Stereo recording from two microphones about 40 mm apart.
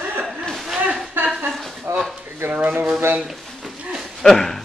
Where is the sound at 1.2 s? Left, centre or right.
Right.